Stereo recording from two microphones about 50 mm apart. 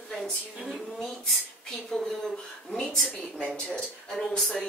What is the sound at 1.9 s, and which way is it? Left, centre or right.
Speech, centre.